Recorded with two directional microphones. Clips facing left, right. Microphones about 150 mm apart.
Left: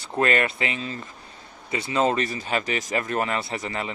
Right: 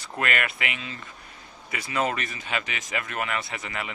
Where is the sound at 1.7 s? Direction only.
25° left (ahead or behind).